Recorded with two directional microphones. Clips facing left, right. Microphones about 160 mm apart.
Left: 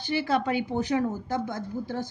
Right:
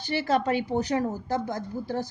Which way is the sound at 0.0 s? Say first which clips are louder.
Right 1 dB; 40° right (ahead or behind).